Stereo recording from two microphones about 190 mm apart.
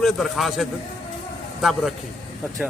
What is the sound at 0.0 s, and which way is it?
Speech, centre (ahead or behind).